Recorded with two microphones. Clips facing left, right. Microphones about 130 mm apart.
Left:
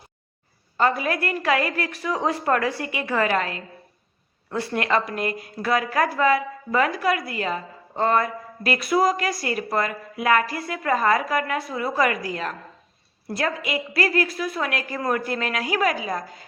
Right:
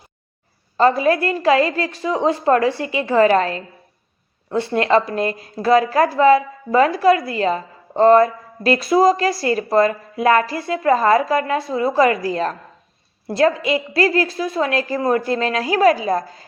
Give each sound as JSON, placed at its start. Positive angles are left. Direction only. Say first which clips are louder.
{"t": 0.8, "sound": "a woman's voice", "louder": "right 7 dB", "side_deg": -30}